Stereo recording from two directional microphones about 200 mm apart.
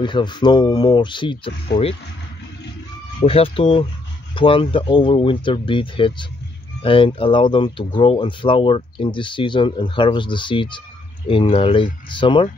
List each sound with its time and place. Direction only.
0.0 s speech: 20° left (ahead or behind)
1.7 s speech: 55° left (ahead or behind)
3.2 s speech: 30° left (ahead or behind)